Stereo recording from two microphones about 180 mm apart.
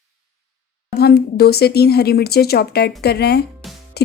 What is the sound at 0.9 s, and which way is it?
A woman's voice, 60° left (ahead or behind).